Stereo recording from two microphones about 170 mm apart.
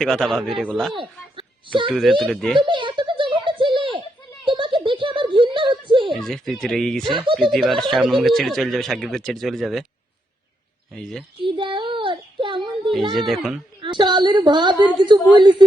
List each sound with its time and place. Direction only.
0.0 s speech: centre (ahead or behind)
0.9 s speech: 30° right (ahead or behind)
1.9 s speech: centre (ahead or behind)
2.6 s a sound: 30° right (ahead or behind)
6.1 s speech: centre (ahead or behind)
7.0 s a woman's voice: 30° right (ahead or behind)
7.3 s speech: centre (ahead or behind)
10.9 s speech: centre (ahead or behind)
11.4 s child singing: 30° right (ahead or behind)
13.1 s speech: centre (ahead or behind)
13.8 s a woman's voice: 25° right (ahead or behind)